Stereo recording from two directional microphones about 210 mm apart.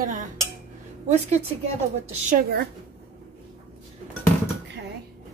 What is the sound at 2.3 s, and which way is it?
Speech, 45° right (ahead or behind).